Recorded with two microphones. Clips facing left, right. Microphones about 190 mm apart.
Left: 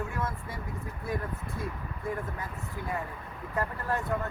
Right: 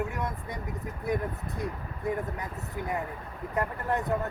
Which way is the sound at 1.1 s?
20° right (ahead or behind).